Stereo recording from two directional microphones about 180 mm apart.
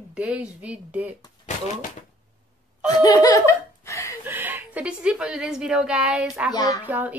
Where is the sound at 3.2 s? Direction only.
15° left (ahead or behind).